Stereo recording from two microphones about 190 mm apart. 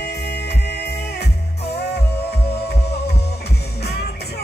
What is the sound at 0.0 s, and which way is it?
Music, 60° left (ahead or behind).